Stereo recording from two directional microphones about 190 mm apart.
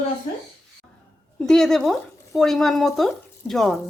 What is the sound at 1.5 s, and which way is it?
Speech, centre (ahead or behind).